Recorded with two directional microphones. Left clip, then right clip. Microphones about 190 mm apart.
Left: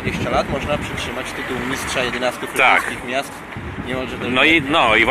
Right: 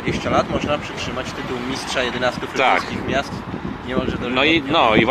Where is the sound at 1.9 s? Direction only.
10° left (ahead or behind).